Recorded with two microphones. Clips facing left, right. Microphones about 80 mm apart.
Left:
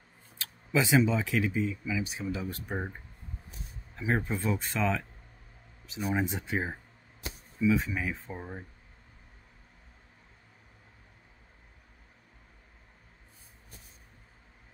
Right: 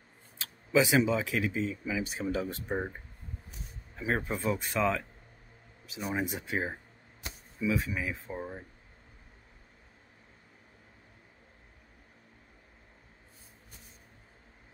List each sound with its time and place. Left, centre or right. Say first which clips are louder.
0.7 s speech: even; centre
1.6 s speech: left 1 dB; right
2.4 s speech: right 2 dB; centre
4.1 s speech: left 1 dB; centre